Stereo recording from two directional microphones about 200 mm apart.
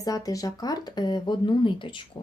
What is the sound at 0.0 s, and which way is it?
Speech, 20° left (ahead or behind).